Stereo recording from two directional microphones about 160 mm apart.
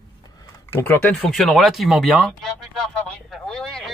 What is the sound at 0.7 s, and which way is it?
Speech, 15° left (ahead or behind).